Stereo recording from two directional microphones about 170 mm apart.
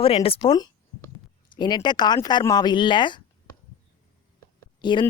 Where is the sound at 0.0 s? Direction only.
35° left (ahead or behind).